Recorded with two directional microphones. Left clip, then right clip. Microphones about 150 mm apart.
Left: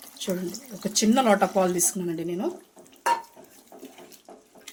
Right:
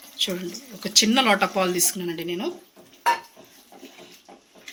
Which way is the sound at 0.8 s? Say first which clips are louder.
Right 3 dB; 40° left (ahead or behind).